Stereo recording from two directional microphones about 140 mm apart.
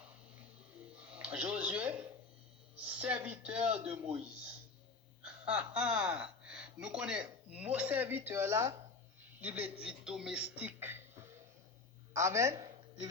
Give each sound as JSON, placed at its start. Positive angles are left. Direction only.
{"t": 0.9, "sound": "a sound", "side_deg": -10}
{"t": 3.0, "sound": "a man's voice", "side_deg": -10}
{"t": 5.2, "sound": "a man's voice", "side_deg": -10}
{"t": 12.1, "sound": "a man's voice", "side_deg": -20}